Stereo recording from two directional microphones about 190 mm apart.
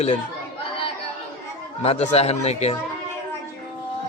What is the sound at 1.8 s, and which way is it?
Speech, 35° left (ahead or behind).